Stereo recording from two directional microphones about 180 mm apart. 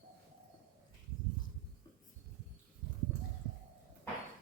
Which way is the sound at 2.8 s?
25° left (ahead or behind).